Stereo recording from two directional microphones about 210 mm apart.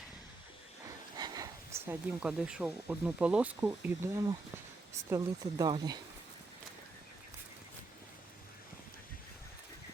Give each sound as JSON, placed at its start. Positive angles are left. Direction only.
{"t": 0.9, "sound": "speech", "side_deg": -20}